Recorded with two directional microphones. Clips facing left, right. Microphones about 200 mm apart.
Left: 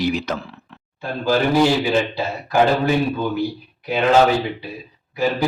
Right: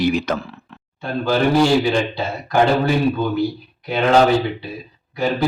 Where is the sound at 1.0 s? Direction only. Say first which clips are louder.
Right 1 dB; 5° left (ahead or behind).